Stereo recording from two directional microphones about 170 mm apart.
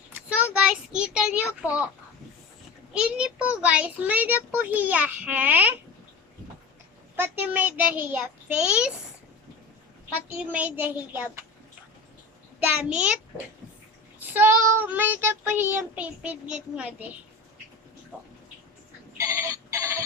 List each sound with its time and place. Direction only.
0.5 s a child's voice: 5° right (ahead or behind)
2.9 s child singing: 5° right (ahead or behind)
7.2 s child singing: 10° right (ahead or behind)
10.3 s child singing: 10° right (ahead or behind)
12.6 s child singing: 5° right (ahead or behind)
19.1 s alarm clock: 20° right (ahead or behind)